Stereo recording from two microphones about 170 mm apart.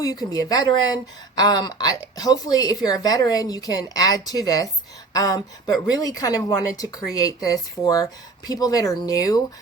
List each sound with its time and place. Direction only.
0.0 s a woman's voice: 20° left (ahead or behind)